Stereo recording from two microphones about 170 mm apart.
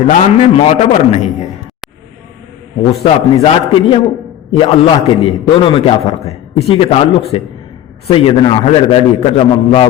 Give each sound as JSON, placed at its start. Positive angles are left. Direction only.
{"t": 0.1, "sound": "a man's voice", "side_deg": 40}
{"t": 2.9, "sound": "a man's voice", "side_deg": 35}